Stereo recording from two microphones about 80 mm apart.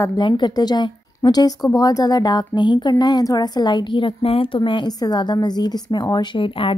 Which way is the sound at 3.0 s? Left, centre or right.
Left.